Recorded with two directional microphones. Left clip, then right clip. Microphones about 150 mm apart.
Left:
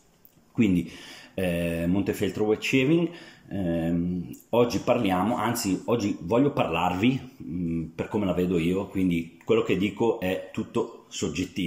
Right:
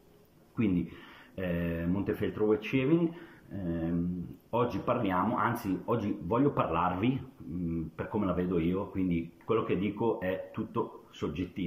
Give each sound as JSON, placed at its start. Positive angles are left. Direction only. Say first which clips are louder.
{"t": 1.3, "sound": "speech", "louder": "left 7 dB", "side_deg": 20}